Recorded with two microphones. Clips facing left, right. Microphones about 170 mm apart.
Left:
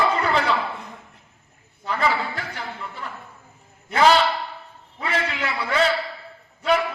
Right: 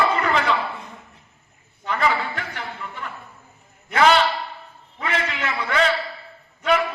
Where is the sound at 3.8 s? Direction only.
35° left (ahead or behind).